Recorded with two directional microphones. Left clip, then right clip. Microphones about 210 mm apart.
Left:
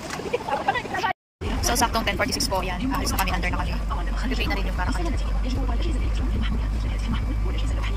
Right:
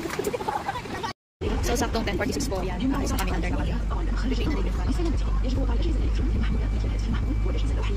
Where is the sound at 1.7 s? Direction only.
5° right (ahead or behind).